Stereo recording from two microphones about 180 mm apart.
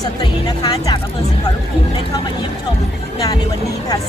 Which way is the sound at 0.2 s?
20° left (ahead or behind).